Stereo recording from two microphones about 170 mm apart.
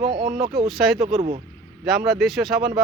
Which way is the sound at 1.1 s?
40° right (ahead or behind).